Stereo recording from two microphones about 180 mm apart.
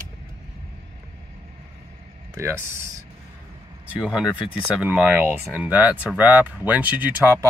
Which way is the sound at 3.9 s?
5° right (ahead or behind).